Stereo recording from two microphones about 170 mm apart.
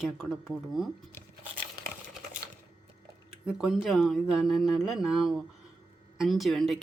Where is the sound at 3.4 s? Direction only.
Centre (ahead or behind).